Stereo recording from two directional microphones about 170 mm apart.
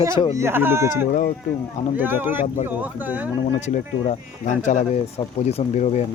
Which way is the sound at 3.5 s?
45° left (ahead or behind).